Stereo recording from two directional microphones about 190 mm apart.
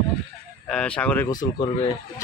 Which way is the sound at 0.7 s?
5° left (ahead or behind).